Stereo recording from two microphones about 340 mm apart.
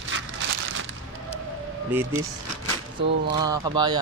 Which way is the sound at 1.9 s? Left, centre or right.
Centre.